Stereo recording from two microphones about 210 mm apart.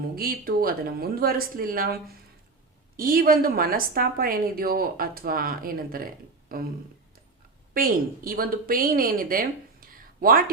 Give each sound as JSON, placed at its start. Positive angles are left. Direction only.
{"t": 0.2, "sound": "a woman's voice", "side_deg": -45}
{"t": 7.7, "sound": "a woman's voice", "side_deg": -45}